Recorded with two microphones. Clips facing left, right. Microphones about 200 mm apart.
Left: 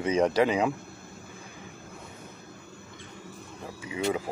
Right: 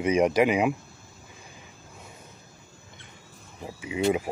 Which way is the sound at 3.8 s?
20° right (ahead or behind).